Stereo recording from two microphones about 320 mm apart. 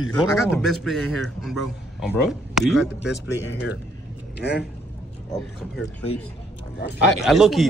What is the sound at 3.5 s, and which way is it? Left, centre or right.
Speech, left.